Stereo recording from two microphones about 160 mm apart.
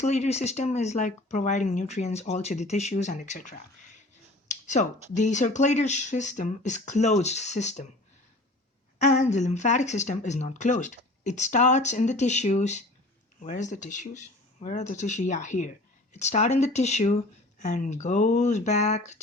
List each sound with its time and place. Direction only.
0.0 s speech: 45° left (ahead or behind)
4.4 s a sound: 50° left (ahead or behind)
5.1 s speech: 50° left (ahead or behind)
9.0 s speech: 45° left (ahead or behind)